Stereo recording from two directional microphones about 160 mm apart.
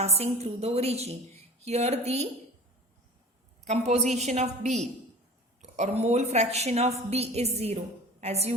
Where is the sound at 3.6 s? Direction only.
45° right (ahead or behind).